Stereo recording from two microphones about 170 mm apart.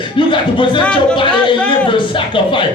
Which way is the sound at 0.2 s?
30° left (ahead or behind).